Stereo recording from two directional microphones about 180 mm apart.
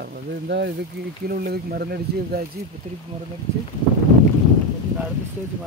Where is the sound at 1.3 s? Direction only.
60° right (ahead or behind).